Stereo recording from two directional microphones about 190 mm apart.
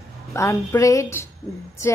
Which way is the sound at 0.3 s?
15° left (ahead or behind).